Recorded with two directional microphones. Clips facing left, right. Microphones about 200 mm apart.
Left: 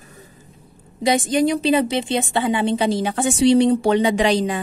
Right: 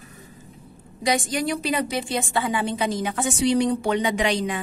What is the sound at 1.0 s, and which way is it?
A woman's voice, 25° left (ahead or behind).